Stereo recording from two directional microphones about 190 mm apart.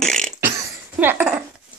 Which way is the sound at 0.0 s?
5° left (ahead or behind).